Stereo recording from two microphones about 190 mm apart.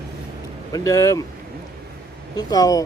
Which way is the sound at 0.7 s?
15° left (ahead or behind).